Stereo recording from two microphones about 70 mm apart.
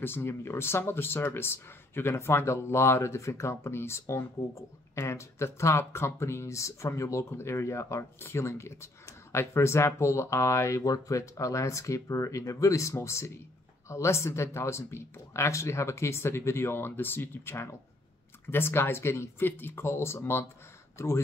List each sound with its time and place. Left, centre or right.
0.0 s speech: left